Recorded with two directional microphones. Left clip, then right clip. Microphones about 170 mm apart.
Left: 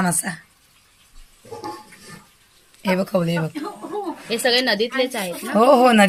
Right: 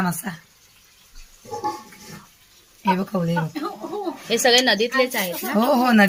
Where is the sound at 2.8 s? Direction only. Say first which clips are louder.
Left 2 dB; 60° left (ahead or behind).